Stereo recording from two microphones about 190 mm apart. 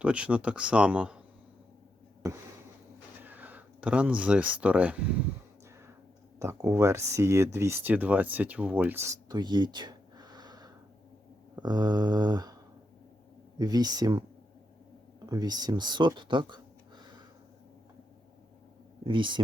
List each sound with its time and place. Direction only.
0.0 s speech: 5° right (ahead or behind)
3.2 s speech: 10° right (ahead or behind)
6.4 s speech: 15° right (ahead or behind)
11.6 s mantra: 20° right (ahead or behind)
13.6 s mantra: 20° right (ahead or behind)
15.3 s speech: 20° right (ahead or behind)
19.0 s mantra: 25° right (ahead or behind)